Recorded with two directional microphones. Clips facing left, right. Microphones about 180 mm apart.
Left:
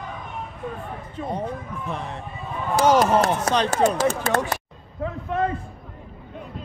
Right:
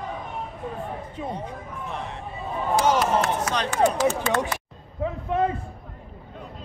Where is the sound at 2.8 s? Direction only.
40° left (ahead or behind).